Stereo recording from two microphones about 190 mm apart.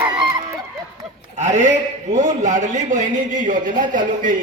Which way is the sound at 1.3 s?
40° right (ahead or behind).